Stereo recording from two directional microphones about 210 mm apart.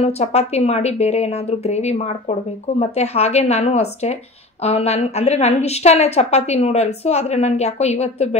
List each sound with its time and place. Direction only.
0.0 s a woman's voice: 30° left (ahead or behind)